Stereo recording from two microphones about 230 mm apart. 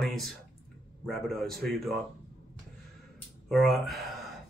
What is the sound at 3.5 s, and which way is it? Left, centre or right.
Speech, centre.